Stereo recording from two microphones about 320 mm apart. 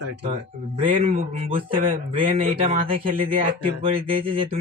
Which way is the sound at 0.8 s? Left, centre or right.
Centre.